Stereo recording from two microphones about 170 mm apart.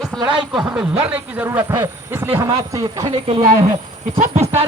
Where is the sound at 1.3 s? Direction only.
15° right (ahead or behind).